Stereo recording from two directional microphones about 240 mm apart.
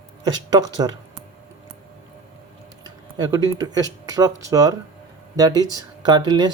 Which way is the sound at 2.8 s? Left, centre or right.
Centre.